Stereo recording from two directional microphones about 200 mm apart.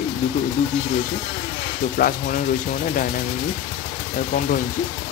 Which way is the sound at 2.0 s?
45° left (ahead or behind).